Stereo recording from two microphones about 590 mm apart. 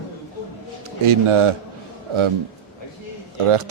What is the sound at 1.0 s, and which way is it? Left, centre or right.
Speech, right.